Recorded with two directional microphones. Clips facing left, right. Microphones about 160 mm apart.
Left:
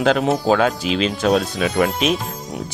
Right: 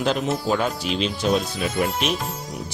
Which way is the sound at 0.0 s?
90° left.